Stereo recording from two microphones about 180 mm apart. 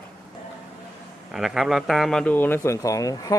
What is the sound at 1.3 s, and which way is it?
Speech, 5° right (ahead or behind).